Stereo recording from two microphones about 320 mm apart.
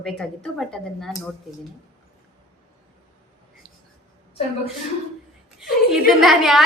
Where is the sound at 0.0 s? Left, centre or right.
Centre.